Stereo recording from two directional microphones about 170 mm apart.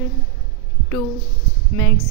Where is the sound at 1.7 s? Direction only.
20° left (ahead or behind).